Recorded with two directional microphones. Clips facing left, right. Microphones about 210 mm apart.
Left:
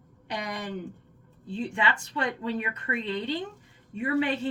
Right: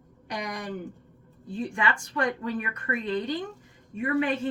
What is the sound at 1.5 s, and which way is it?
Speech, 25° left (ahead or behind).